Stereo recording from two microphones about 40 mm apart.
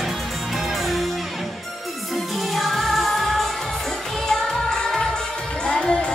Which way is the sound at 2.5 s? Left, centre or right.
Centre.